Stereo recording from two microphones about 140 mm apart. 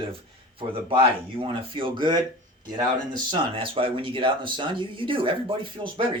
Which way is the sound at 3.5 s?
40° right (ahead or behind).